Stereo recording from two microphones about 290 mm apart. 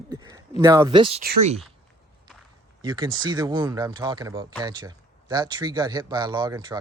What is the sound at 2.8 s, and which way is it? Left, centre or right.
Speech, centre.